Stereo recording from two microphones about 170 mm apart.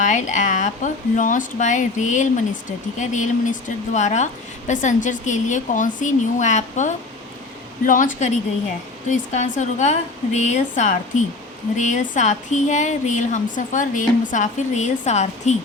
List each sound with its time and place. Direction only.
0.0 s speech: 45° left (ahead or behind)